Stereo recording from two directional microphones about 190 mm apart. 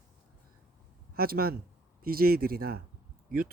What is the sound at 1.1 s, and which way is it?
Speech, 50° right (ahead or behind).